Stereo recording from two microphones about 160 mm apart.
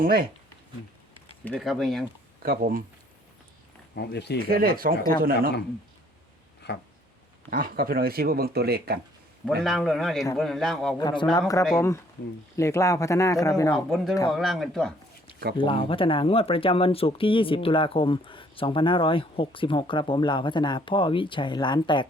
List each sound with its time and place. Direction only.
0.0 s speech: 65° right (ahead or behind)
1.5 s speech: centre (ahead or behind)
2.4 s speech: 70° right (ahead or behind)
3.9 s speech: 90° left
4.4 s speech: 65° right (ahead or behind)
6.6 s a sound: 90° left
7.5 s speech: 65° right (ahead or behind); by 9.0 s 80° right
9.6 s speech: centre (ahead or behind)
10.9 s speech: 30° left (ahead or behind)
13.7 s speech: centre (ahead or behind)
15.5 s speech: 30° left (ahead or behind)